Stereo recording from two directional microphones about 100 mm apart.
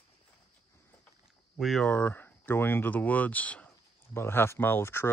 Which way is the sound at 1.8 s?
15° left (ahead or behind).